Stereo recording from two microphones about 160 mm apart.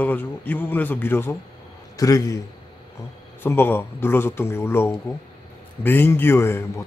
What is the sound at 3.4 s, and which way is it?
A man's voice, 15° left (ahead or behind).